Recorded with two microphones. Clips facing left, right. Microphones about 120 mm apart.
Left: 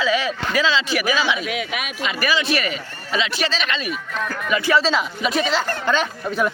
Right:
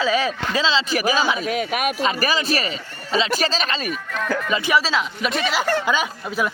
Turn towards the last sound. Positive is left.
turn(degrees=-5)  # may be behind; listen again after turning